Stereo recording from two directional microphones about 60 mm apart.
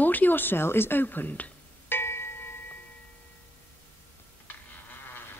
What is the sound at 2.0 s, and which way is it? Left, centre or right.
Music, left.